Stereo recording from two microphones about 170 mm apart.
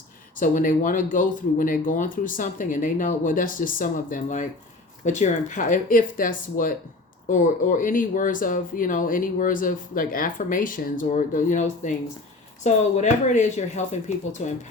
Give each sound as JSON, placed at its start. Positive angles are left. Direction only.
{"t": 0.3, "sound": "speech", "side_deg": 50}